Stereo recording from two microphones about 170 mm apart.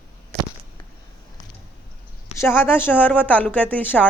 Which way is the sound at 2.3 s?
15° left (ahead or behind).